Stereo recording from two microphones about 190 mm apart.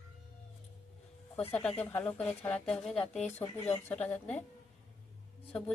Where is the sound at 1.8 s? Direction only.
10° left (ahead or behind).